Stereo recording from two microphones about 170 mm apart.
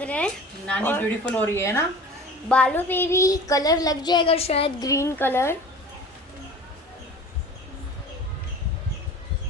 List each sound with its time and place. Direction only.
0.0 s a sound: 5° left (ahead or behind)
0.7 s a woman's voice: 10° left (ahead or behind); by 4.7 s 35° left (ahead or behind)
4.8 s a woman's voice: 20° left (ahead or behind)